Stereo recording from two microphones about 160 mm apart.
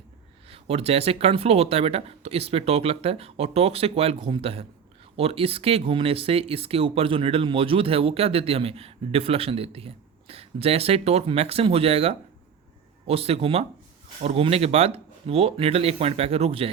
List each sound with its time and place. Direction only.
0.4 s speech: 35° right (ahead or behind)